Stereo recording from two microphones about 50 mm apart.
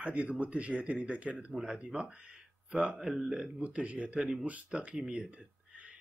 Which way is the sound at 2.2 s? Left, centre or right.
Right.